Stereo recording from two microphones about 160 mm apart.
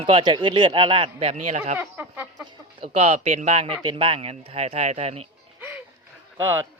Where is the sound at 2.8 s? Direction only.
40° right (ahead or behind).